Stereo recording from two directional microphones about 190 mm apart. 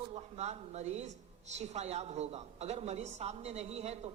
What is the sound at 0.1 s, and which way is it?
A woman's voice, 35° right (ahead or behind).